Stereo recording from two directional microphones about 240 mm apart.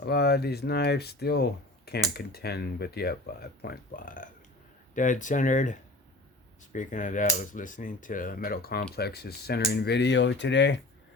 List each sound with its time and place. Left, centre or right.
0.0 s speech: left